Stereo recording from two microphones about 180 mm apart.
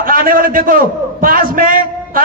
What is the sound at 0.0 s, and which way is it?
A man's voice, 50° right (ahead or behind).